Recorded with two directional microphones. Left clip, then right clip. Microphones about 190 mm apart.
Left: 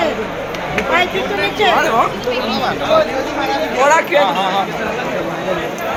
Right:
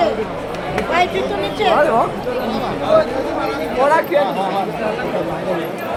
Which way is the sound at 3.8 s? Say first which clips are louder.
Left 3 dB; 25° right (ahead or behind).